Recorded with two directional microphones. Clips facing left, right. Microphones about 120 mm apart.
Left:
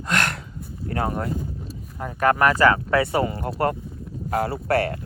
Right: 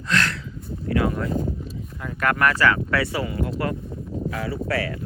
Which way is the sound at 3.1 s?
45° left (ahead or behind).